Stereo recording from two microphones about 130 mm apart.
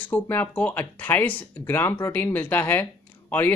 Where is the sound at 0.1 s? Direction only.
15° left (ahead or behind).